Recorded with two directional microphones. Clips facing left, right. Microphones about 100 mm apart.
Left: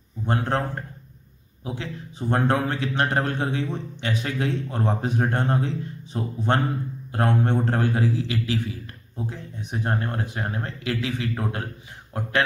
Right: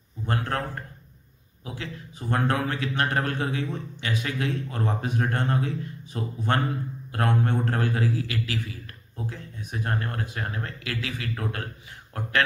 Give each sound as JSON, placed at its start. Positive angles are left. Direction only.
{"t": 0.3, "sound": "a man's voice", "side_deg": 25}